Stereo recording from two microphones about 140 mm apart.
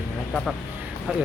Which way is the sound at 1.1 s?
5° right (ahead or behind).